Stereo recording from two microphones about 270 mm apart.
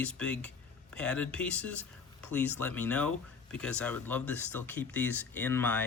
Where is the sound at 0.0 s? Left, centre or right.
Centre.